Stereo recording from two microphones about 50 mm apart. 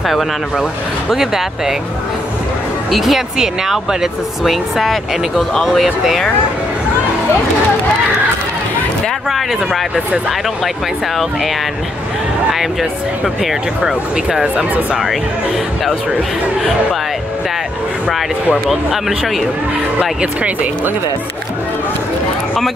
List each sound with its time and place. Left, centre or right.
1.1 s speech: centre
2.9 s speech: centre
9.3 s speech: centre
13.2 s speech: centre
18.7 s speech: centre
20.0 s speech: right